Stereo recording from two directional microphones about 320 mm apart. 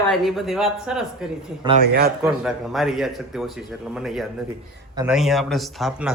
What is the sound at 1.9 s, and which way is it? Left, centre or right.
Speech, right.